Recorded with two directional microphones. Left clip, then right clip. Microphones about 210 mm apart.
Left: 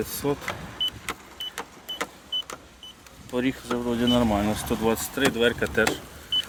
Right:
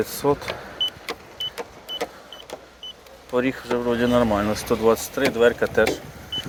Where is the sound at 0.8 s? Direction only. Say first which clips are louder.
Right 2 dB; 35° left (ahead or behind).